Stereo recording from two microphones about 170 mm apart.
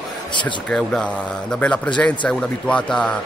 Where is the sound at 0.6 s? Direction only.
5° left (ahead or behind).